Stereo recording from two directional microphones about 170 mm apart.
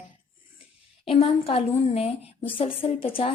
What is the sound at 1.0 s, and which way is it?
A woman's voice, 35° left (ahead or behind).